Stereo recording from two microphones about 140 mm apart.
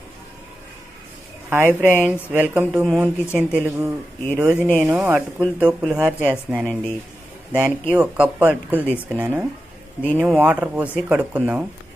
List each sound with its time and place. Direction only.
1.5 s speech: 15° right (ahead or behind)